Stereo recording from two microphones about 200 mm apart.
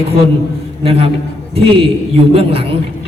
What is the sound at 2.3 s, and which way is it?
Speech, 30° right (ahead or behind).